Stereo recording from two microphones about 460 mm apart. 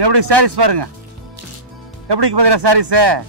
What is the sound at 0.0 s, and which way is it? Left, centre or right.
Speech, right.